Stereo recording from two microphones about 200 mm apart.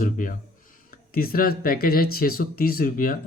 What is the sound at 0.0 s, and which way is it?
Speech, 40° left (ahead or behind).